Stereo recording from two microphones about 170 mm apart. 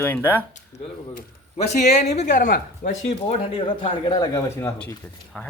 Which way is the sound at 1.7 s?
45° left (ahead or behind).